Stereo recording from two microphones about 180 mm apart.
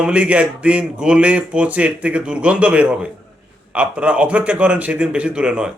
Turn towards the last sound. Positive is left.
turn(degrees=-5)  # may be behind; listen again after turning